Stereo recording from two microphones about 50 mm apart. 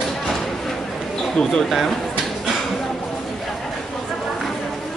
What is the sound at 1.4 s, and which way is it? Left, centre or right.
Speech, left.